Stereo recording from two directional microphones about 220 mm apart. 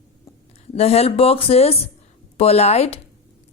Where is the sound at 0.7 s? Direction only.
25° left (ahead or behind).